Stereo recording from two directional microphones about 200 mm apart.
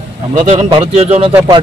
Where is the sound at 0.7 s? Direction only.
30° right (ahead or behind).